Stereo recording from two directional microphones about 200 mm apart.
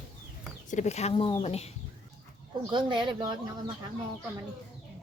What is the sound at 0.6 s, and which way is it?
Speech, 35° left (ahead or behind).